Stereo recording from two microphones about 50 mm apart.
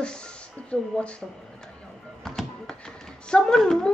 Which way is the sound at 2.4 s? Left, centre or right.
Centre.